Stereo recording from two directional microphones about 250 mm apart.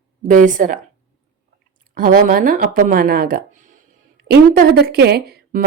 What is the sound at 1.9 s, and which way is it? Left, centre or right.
Speech, right.